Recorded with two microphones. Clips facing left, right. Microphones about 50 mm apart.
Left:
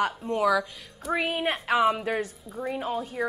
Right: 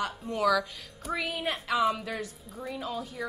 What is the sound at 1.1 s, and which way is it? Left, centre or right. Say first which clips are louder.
A woman's voice: left 5 dB; left.